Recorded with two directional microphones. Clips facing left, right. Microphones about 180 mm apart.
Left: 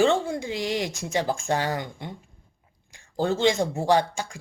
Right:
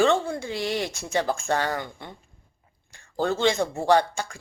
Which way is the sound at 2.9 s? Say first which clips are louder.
Left 1 dB; 15° left (ahead or behind).